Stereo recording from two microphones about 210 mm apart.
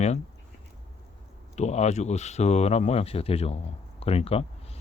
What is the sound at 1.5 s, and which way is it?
Speech, 30° left (ahead or behind).